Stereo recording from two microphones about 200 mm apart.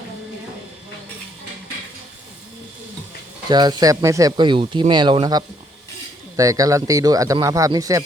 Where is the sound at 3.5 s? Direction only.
20° right (ahead or behind).